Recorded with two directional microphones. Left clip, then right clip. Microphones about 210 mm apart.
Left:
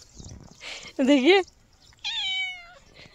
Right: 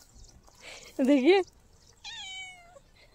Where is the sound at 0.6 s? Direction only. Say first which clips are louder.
Left 4 dB; 35° left (ahead or behind).